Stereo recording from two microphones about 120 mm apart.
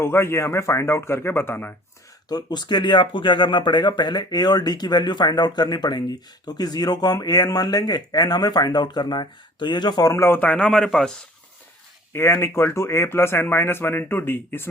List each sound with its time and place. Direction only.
0.0 s speech: 20° left (ahead or behind)
2.3 s speech: 35° left (ahead or behind); by 11.1 s 5° left (ahead or behind)
12.1 s speech: 20° left (ahead or behind)